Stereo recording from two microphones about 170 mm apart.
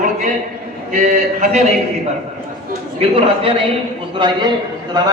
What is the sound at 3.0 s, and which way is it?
Speech, 35° right (ahead or behind).